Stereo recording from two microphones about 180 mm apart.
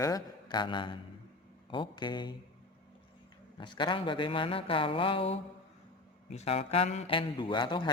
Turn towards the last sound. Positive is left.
turn(degrees=25)  # may be behind; listen again after turning